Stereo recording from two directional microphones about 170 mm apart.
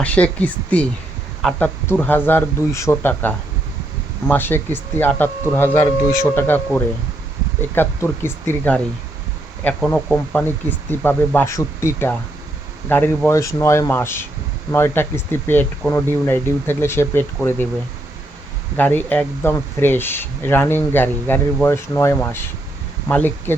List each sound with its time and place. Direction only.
0.0 s speech: 10° left (ahead or behind)
7.6 s speech: 15° left (ahead or behind)
18.8 s speech: 10° left (ahead or behind)